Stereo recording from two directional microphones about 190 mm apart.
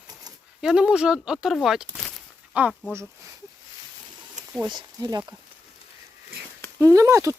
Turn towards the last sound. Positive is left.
turn(degrees=-15)  # may be behind; listen again after turning